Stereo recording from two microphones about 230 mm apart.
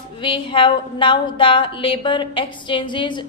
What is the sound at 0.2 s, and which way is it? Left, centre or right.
A woman's voice, left.